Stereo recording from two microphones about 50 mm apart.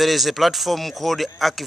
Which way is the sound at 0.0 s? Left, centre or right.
Centre.